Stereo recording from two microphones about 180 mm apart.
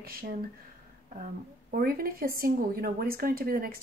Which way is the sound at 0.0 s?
55° right (ahead or behind).